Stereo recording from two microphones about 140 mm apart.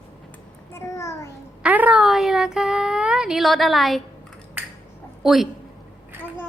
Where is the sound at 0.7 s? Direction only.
20° left (ahead or behind).